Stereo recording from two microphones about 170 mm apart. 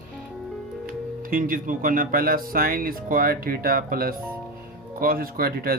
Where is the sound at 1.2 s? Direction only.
55° right (ahead or behind).